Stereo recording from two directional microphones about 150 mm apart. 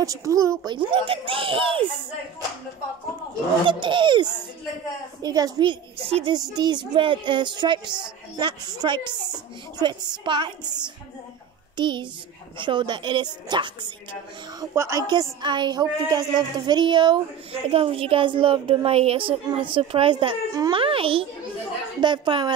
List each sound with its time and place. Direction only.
0.0 s a woman's voice: 20° right (ahead or behind)
3.6 s a woman's voice: 35° right (ahead or behind)
14.6 s a woman's voice: 20° right (ahead or behind)